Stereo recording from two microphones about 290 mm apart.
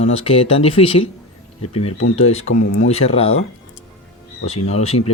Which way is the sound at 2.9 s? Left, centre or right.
Left.